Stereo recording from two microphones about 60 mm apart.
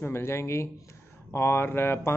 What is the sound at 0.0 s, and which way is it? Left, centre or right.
Speech, left.